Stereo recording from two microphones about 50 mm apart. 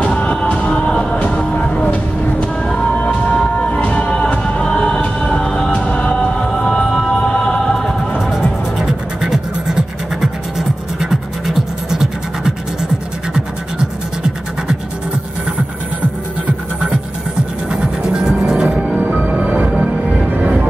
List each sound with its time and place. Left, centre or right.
0.0 s music: left
3.0 s music: left
8.2 s music: centre
17.6 s music: centre
18.9 s music: right